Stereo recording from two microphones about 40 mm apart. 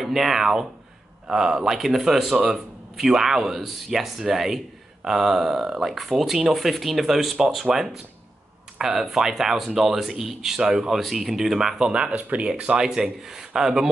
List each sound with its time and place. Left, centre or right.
0.0 s speech: centre
8.7 s a sound: centre
9.0 s speech: centre
11.9 s speech: right